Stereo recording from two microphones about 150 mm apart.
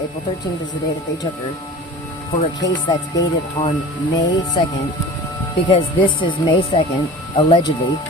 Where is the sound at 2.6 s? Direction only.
25° left (ahead or behind).